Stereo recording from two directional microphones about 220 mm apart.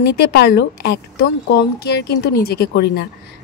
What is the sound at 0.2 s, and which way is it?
Speech, 45° left (ahead or behind).